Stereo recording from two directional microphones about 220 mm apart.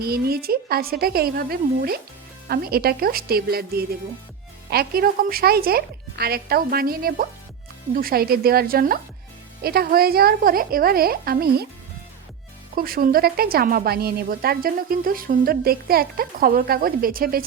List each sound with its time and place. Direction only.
0.0 s a woman's voice: 45° right (ahead or behind)
12.7 s a woman's voice: 40° right (ahead or behind)